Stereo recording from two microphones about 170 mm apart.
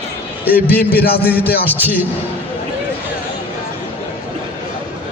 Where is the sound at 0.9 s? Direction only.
65° left (ahead or behind).